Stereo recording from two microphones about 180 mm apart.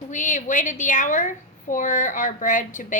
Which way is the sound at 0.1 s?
45° left (ahead or behind).